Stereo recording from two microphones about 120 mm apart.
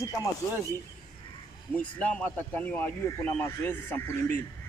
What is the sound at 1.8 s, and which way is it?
Speech, 10° left (ahead or behind).